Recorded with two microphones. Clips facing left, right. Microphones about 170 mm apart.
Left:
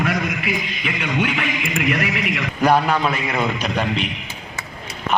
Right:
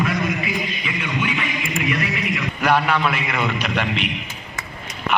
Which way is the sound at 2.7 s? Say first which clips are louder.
Left 1 dB; 40° left (ahead or behind).